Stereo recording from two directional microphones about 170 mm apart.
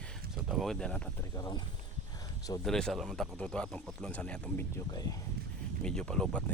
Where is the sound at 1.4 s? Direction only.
25° left (ahead or behind).